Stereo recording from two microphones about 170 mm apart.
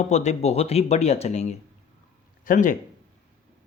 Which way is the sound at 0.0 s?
40° left (ahead or behind).